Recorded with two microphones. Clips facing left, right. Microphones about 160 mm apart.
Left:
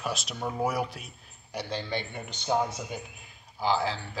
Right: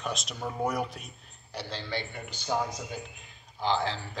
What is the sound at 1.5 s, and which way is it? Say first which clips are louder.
A man's voice: left 3 dB; 15° left (ahead or behind).